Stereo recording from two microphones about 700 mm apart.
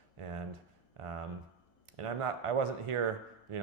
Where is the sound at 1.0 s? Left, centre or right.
Right.